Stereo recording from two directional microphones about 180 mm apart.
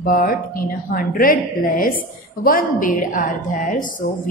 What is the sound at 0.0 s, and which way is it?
A woman's voice, 50° left (ahead or behind).